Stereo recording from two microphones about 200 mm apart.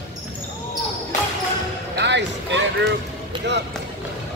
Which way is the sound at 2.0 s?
60° right (ahead or behind).